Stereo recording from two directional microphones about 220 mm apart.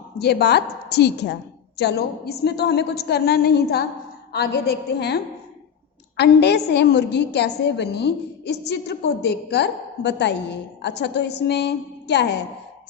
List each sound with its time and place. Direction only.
0.2 s a woman's voice: 50° left (ahead or behind)